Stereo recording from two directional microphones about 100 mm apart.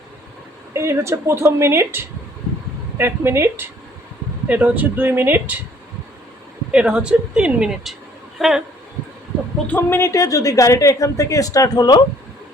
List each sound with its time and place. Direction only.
0.7 s a woman's voice: 25° right (ahead or behind)
6.7 s speech: 10° right (ahead or behind)
9.6 s a woman's voice: 20° left (ahead or behind); by 12.0 s 45° left (ahead or behind)